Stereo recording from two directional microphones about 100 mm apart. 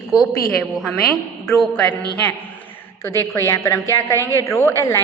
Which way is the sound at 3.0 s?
30° left (ahead or behind).